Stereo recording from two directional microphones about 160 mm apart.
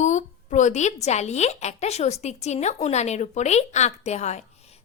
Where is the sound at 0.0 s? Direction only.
50° left (ahead or behind).